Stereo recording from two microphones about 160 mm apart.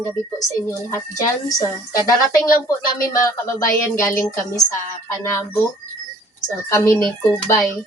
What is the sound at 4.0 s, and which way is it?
A woman's voice, 20° left (ahead or behind).